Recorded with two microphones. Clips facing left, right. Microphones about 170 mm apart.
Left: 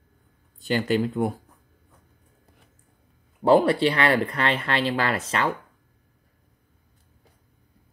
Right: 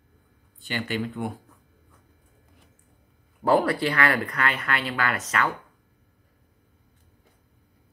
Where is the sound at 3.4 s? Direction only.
20° left (ahead or behind).